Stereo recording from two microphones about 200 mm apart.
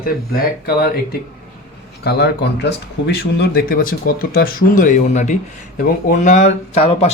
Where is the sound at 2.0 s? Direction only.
55° left (ahead or behind).